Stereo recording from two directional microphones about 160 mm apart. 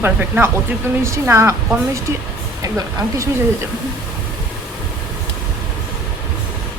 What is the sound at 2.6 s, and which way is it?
Speech, 20° right (ahead or behind).